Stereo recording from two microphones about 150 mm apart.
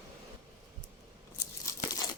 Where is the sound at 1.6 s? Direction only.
25° left (ahead or behind).